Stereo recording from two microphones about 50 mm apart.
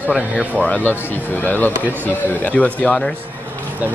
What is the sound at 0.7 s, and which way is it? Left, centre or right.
Speech, left.